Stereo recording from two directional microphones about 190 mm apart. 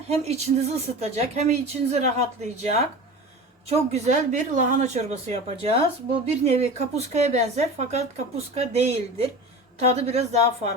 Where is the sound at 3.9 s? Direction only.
35° right (ahead or behind).